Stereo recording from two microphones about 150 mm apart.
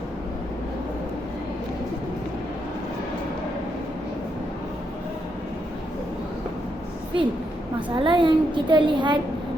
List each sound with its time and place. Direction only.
7.9 s a woman's voice: 35° right (ahead or behind)